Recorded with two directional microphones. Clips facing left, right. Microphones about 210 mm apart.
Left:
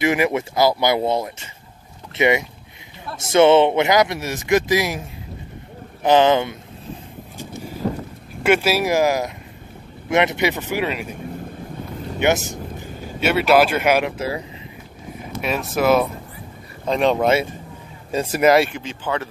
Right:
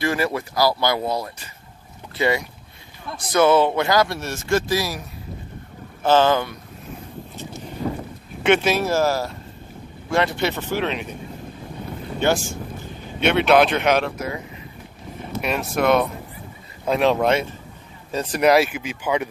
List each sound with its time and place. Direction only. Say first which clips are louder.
0.0 s speech: left 4 dB; 20° left (ahead or behind)
6.0 s speech: left 2 dB; 20° left (ahead or behind)
8.4 s speech: left 1 dB; 5° left (ahead or behind)
12.2 s speech: left 2 dB; 20° left (ahead or behind)
13.2 s speech: even; 5° left (ahead or behind)
14.1 s speech: left 3 dB; 30° left (ahead or behind)
15.4 s speech: left 1 dB; centre (ahead or behind)